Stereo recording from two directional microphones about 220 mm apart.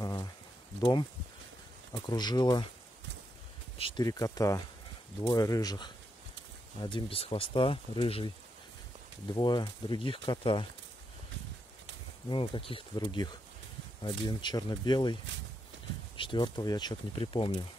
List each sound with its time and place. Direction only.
0.0 s a sound: 15° left (ahead or behind)
1.9 s speech: 20° left (ahead or behind)
3.7 s speech: 20° left (ahead or behind)
9.3 s speech: 20° left (ahead or behind)
12.3 s speech: 25° left (ahead or behind)
16.2 s speech: 20° left (ahead or behind)